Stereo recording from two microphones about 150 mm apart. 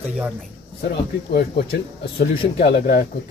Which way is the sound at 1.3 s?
90° left.